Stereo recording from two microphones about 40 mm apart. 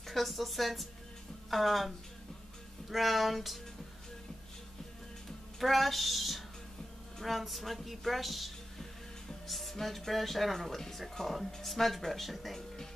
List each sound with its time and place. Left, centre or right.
0.0 s speech: centre
5.6 s speech: centre